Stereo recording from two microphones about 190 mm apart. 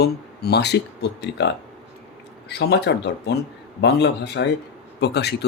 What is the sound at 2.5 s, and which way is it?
Speech, 60° left (ahead or behind).